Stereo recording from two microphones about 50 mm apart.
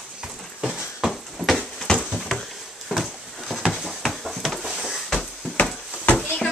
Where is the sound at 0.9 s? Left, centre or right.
Centre.